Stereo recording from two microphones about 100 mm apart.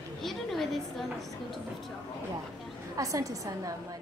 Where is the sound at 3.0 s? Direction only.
35° right (ahead or behind).